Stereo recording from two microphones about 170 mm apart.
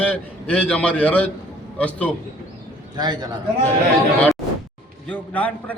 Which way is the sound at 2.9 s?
25° right (ahead or behind).